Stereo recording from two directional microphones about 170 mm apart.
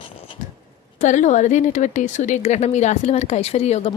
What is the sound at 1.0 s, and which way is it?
A woman's voice, 45° left (ahead or behind).